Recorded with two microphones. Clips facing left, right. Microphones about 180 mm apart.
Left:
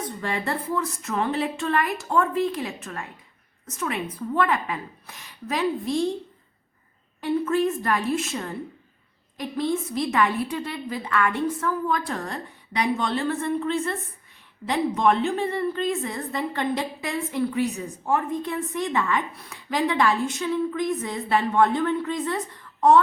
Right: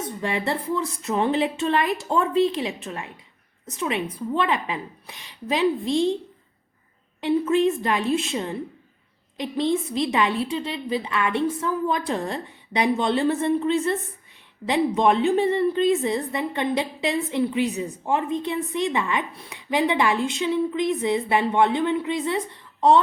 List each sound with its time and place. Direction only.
0.2 s a woman's voice: 20° right (ahead or behind)
7.4 s a woman's voice: 20° right (ahead or behind)